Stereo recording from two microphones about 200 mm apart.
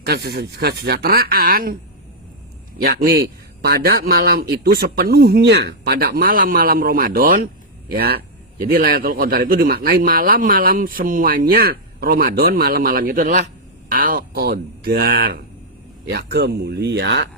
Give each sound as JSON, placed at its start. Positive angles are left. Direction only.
{"t": 0.0, "sound": "speech", "side_deg": -50}
{"t": 2.7, "sound": "speech", "side_deg": -50}